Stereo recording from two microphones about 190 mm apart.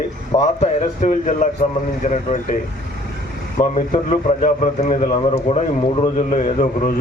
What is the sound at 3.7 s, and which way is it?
Speech, 40° left (ahead or behind).